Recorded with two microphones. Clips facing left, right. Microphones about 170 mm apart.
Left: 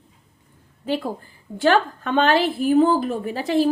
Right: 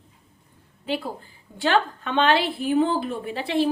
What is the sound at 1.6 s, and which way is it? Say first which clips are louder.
A woman's voice: left 4 dB; 45° left (ahead or behind).